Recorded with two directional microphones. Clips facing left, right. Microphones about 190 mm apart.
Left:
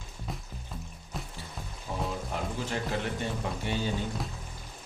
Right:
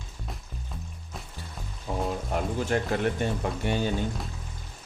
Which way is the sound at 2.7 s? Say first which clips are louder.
Right 7 dB; 55° right (ahead or behind).